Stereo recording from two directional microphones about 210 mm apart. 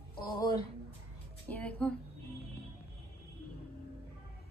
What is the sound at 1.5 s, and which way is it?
Speech, 5° left (ahead or behind).